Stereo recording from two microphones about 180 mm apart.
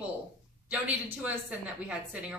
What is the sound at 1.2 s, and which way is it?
A woman's voice, 5° right (ahead or behind).